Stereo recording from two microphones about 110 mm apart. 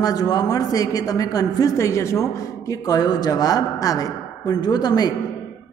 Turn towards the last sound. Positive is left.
turn(degrees=40)  # may be behind; listen again after turning